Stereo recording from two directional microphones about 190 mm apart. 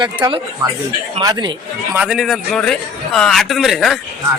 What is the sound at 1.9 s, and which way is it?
A man's voice, 5° right (ahead or behind).